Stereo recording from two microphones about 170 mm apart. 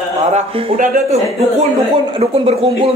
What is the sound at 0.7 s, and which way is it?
Speech, 50° right (ahead or behind).